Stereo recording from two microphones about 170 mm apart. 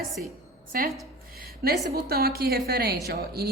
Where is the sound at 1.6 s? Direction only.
65° right (ahead or behind).